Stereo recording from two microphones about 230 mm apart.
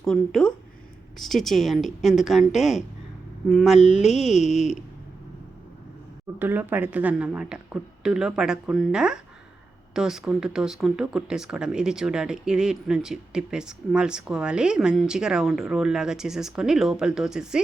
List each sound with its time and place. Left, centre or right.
0.0 s speech: centre
3.8 s mantra: left
4.4 s speech: centre
6.4 s speech: centre